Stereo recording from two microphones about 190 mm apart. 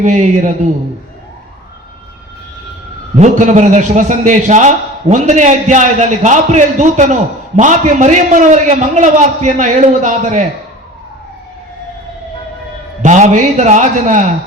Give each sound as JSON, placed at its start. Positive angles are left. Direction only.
{"t": 0.0, "sound": "a man's voice", "side_deg": -40}
{"t": 3.2, "sound": "a man's voice", "side_deg": -40}
{"t": 13.0, "sound": "a man's voice", "side_deg": -40}